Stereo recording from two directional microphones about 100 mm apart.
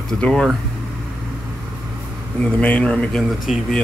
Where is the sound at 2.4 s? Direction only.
15° left (ahead or behind).